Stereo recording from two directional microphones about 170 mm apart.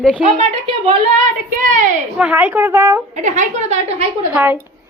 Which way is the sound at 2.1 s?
10° right (ahead or behind).